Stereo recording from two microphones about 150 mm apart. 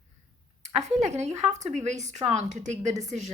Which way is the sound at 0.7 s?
50° right (ahead or behind).